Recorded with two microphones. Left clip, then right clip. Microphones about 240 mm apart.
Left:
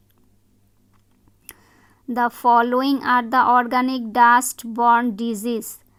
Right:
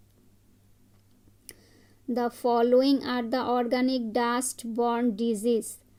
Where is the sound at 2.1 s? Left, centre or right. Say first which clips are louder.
Left 9 dB; centre.